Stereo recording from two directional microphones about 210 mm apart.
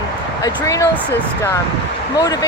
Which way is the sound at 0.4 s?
15° left (ahead or behind).